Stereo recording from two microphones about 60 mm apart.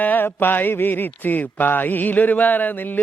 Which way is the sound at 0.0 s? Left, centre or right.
Left.